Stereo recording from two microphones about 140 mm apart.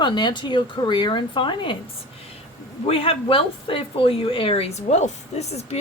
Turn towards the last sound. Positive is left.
turn(degrees=50)  # may be behind; listen again after turning